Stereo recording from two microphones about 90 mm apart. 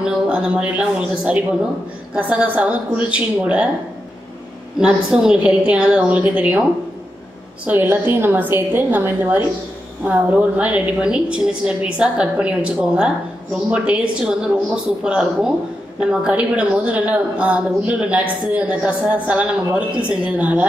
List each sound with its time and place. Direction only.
0.0 s a woman's voice: 10° right (ahead or behind)
4.7 s a woman's voice: 5° right (ahead or behind)
7.6 s a woman's voice: 20° right (ahead or behind)